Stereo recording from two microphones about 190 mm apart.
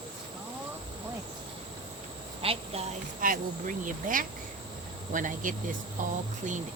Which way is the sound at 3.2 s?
45° right (ahead or behind).